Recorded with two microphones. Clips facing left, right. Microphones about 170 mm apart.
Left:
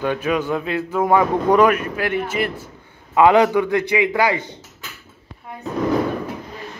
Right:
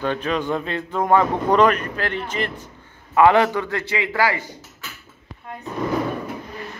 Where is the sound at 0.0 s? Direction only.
10° left (ahead or behind).